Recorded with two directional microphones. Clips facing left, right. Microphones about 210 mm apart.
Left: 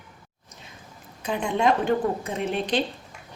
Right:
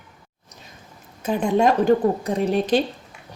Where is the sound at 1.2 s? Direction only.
45° right (ahead or behind).